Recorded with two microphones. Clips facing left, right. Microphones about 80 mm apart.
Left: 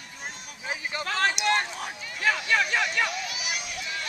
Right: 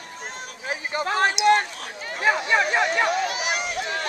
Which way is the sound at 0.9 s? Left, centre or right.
Right.